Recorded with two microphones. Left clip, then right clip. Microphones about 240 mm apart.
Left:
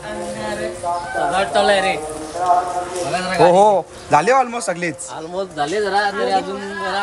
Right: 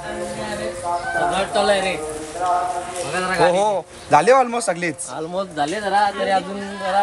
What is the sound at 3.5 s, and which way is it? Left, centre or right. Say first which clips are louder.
Speech: left 6 dB; left.